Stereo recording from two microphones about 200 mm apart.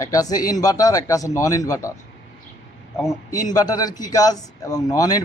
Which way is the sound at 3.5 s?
20° left (ahead or behind).